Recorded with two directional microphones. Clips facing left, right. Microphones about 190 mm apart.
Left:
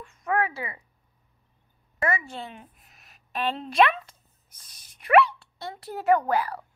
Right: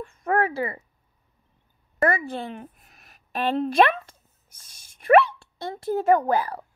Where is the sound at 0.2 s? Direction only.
45° right (ahead or behind).